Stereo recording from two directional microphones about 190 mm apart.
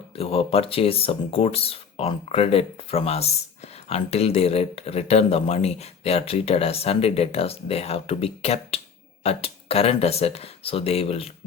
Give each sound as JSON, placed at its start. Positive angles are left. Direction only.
{"t": 0.2, "sound": "speech", "side_deg": 30}